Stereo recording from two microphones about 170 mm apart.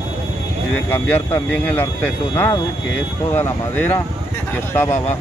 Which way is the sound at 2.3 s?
20° left (ahead or behind).